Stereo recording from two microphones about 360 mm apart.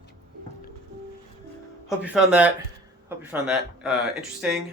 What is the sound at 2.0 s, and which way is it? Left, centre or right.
Speech, centre.